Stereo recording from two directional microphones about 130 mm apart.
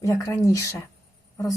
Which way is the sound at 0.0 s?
25° left (ahead or behind).